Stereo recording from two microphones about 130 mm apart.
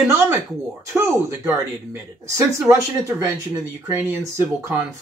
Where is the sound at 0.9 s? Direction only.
20° right (ahead or behind).